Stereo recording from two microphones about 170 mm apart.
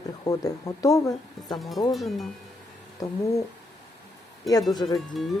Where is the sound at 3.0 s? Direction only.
20° left (ahead or behind).